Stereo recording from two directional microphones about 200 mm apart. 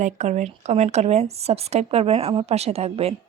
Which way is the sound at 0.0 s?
35° right (ahead or behind).